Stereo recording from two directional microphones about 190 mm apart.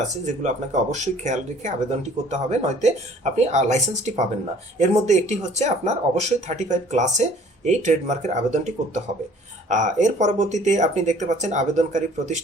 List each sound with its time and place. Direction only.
0.4 s speech: 40° right (ahead or behind)